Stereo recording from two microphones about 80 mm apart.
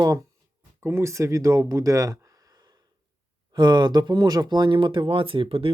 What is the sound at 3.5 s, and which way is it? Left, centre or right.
Speech, right.